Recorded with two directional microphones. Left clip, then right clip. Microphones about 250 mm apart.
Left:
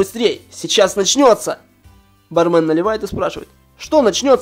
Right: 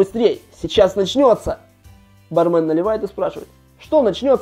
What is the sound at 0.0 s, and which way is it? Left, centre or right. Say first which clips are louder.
Speech: right 1 dB; centre.